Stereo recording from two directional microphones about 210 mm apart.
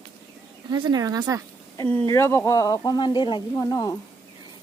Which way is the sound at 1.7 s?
15° left (ahead or behind).